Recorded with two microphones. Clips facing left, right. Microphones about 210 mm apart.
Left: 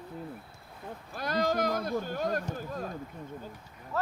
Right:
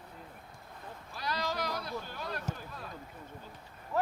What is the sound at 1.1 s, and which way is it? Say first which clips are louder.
Speech: left 7 dB; 50° left (ahead or behind).